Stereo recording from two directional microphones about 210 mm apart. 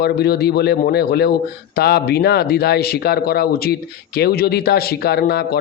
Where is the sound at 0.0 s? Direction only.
50° left (ahead or behind).